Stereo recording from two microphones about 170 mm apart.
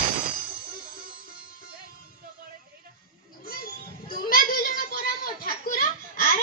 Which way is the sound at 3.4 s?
60° left (ahead or behind).